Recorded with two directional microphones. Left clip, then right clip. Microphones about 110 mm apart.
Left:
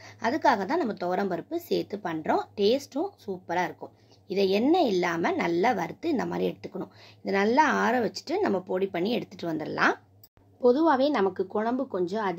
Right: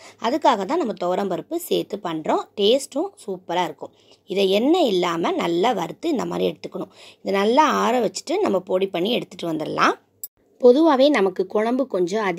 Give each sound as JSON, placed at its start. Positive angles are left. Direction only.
{"t": 0.0, "sound": "a woman's voice", "side_deg": -40}
{"t": 10.6, "sound": "speech", "side_deg": -90}